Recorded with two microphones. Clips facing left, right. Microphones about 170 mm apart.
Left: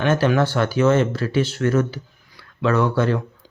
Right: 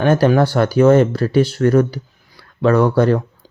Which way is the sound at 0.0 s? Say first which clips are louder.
Right 5 dB; 35° right (ahead or behind).